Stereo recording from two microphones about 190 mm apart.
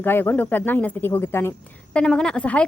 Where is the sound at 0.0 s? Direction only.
10° left (ahead or behind).